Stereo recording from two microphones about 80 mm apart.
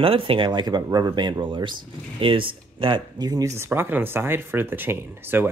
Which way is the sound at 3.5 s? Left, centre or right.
Right.